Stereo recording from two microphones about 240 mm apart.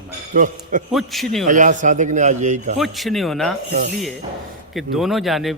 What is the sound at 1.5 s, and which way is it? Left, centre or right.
A man's voice, right.